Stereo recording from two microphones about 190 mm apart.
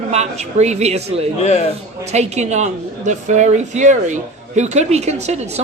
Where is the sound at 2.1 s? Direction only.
35° right (ahead or behind).